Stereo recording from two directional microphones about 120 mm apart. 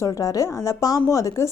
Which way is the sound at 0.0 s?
30° left (ahead or behind).